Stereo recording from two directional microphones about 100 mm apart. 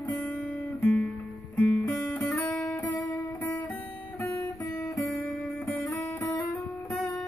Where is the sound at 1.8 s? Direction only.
25° left (ahead or behind).